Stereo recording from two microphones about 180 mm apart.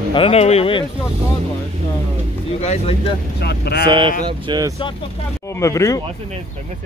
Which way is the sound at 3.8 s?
25° right (ahead or behind).